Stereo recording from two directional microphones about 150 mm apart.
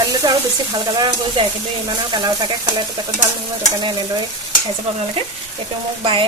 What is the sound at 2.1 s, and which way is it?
Speech, 30° right (ahead or behind).